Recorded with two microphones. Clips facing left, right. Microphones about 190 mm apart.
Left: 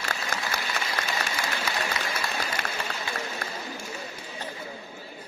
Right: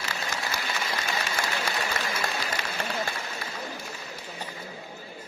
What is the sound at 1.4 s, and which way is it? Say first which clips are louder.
Applause: right 1 dB; 50° right (ahead or behind).